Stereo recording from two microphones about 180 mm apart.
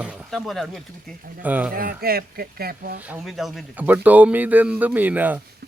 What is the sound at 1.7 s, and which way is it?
Speech, 55° right (ahead or behind).